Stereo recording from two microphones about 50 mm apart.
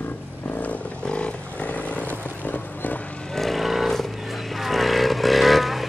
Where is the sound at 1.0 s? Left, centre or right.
Left.